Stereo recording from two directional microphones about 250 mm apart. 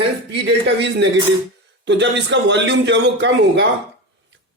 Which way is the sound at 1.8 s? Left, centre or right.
Right.